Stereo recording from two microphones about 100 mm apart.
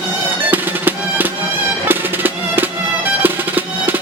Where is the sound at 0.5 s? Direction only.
15° right (ahead or behind).